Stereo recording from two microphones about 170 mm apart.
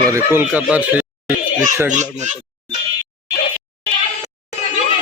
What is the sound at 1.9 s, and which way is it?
Speech, 45° right (ahead or behind).